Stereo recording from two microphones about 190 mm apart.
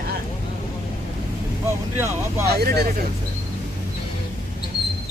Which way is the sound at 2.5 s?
55° right (ahead or behind).